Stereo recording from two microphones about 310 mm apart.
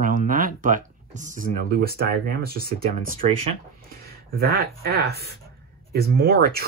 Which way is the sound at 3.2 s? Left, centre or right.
Right.